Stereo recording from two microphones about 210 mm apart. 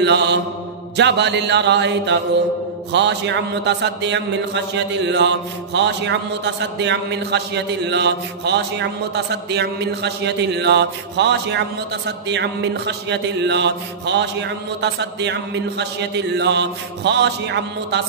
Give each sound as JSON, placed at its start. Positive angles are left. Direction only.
{"t": 0.0, "sound": "a man's voice", "side_deg": -55}